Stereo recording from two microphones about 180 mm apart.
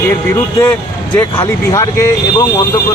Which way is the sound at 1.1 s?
15° left (ahead or behind).